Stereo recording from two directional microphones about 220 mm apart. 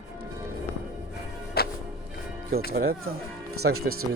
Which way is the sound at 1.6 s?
45° left (ahead or behind).